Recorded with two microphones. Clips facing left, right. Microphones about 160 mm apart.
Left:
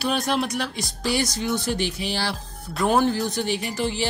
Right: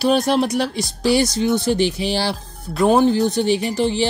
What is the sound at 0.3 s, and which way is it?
Speech, 35° right (ahead or behind).